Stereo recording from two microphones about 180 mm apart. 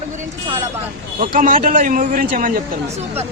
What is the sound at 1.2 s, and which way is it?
A man's voice, 50° right (ahead or behind).